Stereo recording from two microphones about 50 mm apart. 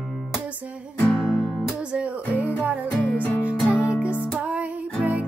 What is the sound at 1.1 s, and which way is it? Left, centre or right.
Music, left.